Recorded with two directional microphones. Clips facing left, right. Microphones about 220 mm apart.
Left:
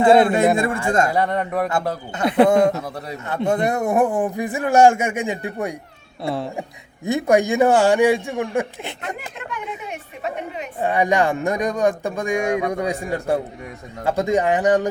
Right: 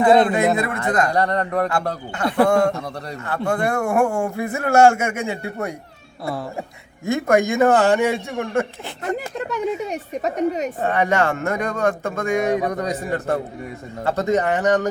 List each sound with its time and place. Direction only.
0.5 s speech: 30° left (ahead or behind)
1.1 s speech: 5° left (ahead or behind)
2.1 s speech: 20° left (ahead or behind)
9.1 s a woman's voice: 40° right (ahead or behind)
10.8 s speech: 15° left (ahead or behind)